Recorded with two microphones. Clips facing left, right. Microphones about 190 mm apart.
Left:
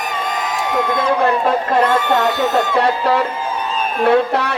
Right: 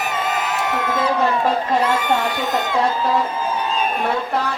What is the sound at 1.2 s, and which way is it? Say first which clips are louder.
Speech: left 3 dB; 60° left (ahead or behind).